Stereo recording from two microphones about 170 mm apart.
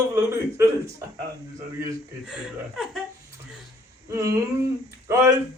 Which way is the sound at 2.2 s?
Centre (ahead or behind).